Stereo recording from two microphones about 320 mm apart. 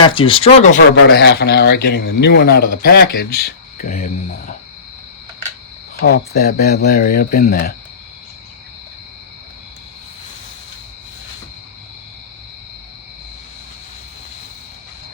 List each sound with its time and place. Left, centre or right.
0.1 s speech: centre
0.9 s a man's voice: left
6.0 s speech: left